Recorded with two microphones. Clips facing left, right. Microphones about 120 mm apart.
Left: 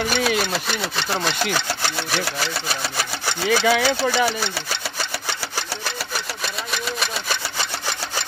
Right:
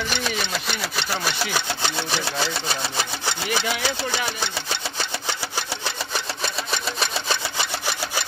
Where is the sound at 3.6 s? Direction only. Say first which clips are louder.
Left 10 dB; 90° left.